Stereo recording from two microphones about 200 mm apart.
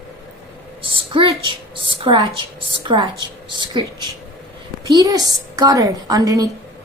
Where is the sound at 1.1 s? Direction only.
25° right (ahead or behind).